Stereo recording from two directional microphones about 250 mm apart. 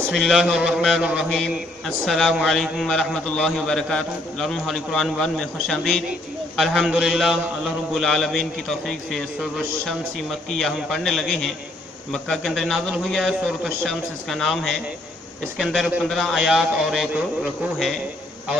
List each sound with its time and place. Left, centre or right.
0.1 s a man's voice: centre